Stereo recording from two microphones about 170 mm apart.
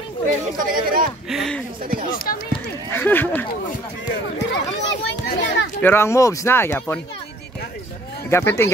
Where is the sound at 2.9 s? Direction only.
10° left (ahead or behind).